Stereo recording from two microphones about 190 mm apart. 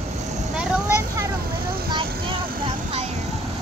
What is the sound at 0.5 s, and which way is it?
Vehicle, 5° right (ahead or behind).